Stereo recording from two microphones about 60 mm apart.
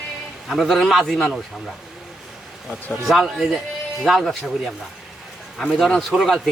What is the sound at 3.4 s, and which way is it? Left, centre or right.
Speech, centre.